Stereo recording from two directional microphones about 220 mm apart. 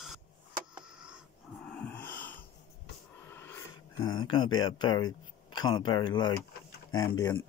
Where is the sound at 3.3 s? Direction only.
10° left (ahead or behind).